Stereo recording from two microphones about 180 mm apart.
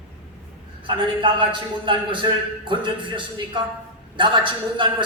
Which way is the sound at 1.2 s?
25° right (ahead or behind).